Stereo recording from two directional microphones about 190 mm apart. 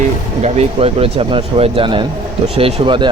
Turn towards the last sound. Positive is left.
turn(degrees=-25)  # may be behind; listen again after turning